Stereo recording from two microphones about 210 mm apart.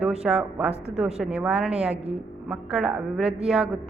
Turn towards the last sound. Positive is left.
turn(degrees=0)  # may be behind; listen again after turning